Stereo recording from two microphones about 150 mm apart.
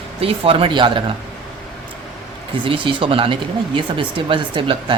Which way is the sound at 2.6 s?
35° right (ahead or behind).